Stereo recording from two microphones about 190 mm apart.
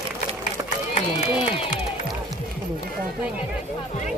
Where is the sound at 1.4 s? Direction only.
30° left (ahead or behind).